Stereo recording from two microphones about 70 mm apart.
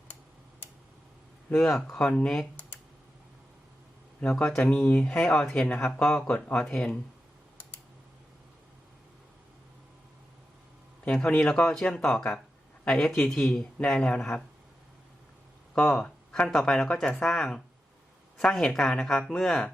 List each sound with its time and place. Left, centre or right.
1.6 s speech: centre
4.2 s speech: centre
6.2 s speech: left
6.6 s speech: centre
11.0 s speech: centre
11.7 s speech: centre
15.7 s speech: centre